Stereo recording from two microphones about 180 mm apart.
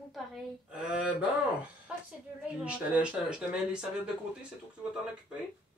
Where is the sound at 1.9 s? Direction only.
5° right (ahead or behind).